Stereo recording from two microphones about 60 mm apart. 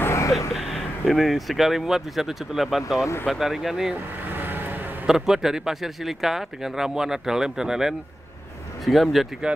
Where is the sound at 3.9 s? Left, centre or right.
Right.